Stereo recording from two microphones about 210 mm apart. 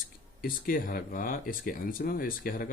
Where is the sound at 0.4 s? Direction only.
40° left (ahead or behind).